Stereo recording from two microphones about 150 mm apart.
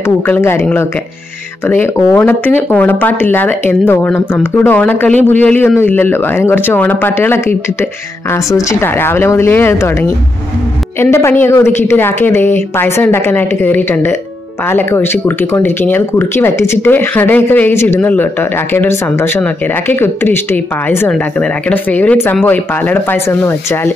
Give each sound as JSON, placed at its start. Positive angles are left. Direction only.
{"t": 0.0, "sound": "speech", "side_deg": 15}
{"t": 8.5, "sound": "speech", "side_deg": 15}